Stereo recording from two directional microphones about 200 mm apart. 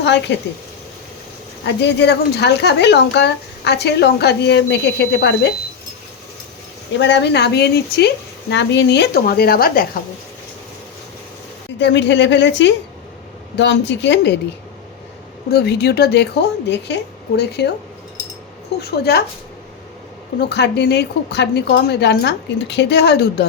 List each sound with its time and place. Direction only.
0.0 s speech: 60° left (ahead or behind)
1.6 s speech: 60° left (ahead or behind)
7.0 s speech: 60° left (ahead or behind)
11.8 s speech: 60° left (ahead or behind)
15.4 s speech: 55° left (ahead or behind)
18.8 s speech: 50° left (ahead or behind)
20.5 s speech: 55° left (ahead or behind)